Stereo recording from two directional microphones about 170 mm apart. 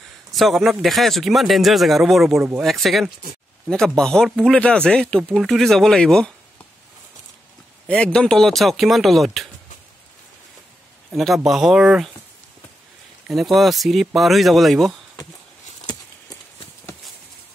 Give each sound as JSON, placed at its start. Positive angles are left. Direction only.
{"t": 0.3, "sound": "a man's voice", "side_deg": 0}
{"t": 7.9, "sound": "a man's voice", "side_deg": 5}
{"t": 11.1, "sound": "a man's voice", "side_deg": 0}
{"t": 13.3, "sound": "a man's voice", "side_deg": 0}
{"t": 15.9, "sound": "horse", "side_deg": 20}